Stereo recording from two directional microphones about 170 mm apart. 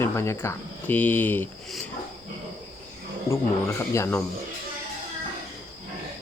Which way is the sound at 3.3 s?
15° left (ahead or behind).